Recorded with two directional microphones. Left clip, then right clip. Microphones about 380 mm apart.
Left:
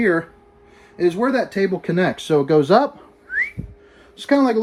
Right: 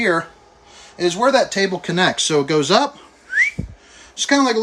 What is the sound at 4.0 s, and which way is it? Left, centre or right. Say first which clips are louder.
Speech: right 1 dB; centre.